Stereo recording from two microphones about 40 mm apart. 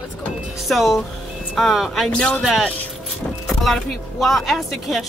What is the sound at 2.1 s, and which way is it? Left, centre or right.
Speech, left.